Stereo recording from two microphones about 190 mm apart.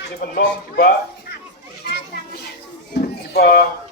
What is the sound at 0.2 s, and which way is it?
Speech, 50° left (ahead or behind).